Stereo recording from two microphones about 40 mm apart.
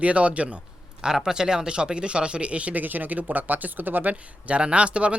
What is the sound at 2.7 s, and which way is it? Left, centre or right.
Speech, right.